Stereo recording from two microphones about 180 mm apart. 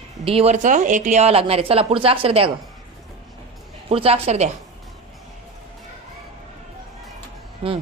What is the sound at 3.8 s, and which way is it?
Speech, 30° right (ahead or behind).